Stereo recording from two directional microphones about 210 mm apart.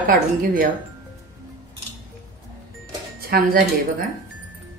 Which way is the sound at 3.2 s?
45° right (ahead or behind).